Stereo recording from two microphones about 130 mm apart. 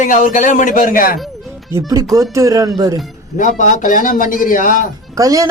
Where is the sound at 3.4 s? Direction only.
80° left.